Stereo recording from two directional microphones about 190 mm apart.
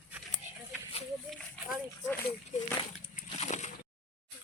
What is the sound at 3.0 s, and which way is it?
Slosh, 30° left (ahead or behind).